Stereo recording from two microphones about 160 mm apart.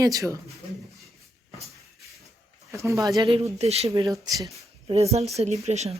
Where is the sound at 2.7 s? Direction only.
20° right (ahead or behind).